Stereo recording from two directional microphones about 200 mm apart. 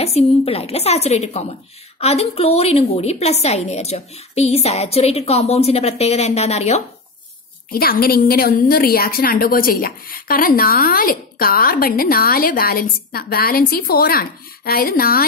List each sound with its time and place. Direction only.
0.0 s a woman's voice: 30° left (ahead or behind)
7.7 s a woman's voice: 50° left (ahead or behind)